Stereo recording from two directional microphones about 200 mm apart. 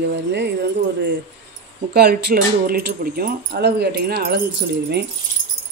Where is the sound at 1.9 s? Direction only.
55° right (ahead or behind).